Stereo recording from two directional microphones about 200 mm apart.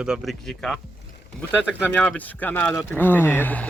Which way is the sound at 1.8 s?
5° left (ahead or behind).